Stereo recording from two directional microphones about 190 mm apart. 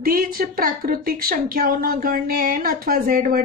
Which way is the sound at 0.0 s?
50° right (ahead or behind).